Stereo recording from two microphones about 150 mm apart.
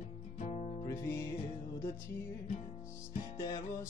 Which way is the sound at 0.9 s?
20° left (ahead or behind).